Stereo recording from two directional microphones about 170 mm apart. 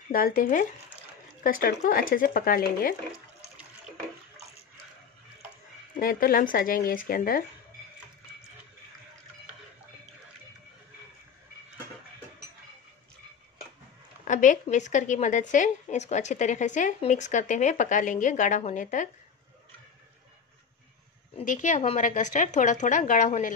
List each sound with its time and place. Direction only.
0.1 s speech: 60° left (ahead or behind)
5.9 s speech: 55° left (ahead or behind)
14.2 s speech: 50° left (ahead or behind)
21.4 s speech: 45° left (ahead or behind)